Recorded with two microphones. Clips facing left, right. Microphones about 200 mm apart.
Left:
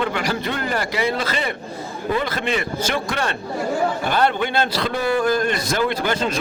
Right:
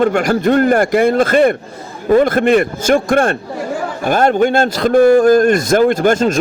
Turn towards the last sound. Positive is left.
turn(degrees=-45)  # may be behind; listen again after turning